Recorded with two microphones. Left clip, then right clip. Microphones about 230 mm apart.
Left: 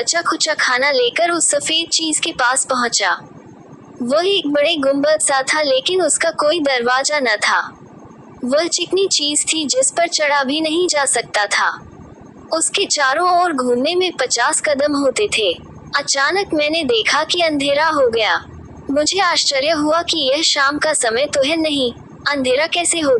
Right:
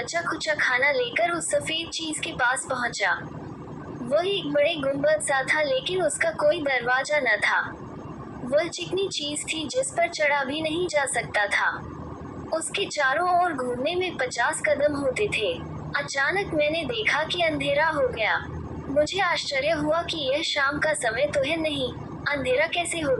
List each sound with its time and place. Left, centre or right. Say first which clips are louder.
0.0 s a woman's voice: left 10 dB; left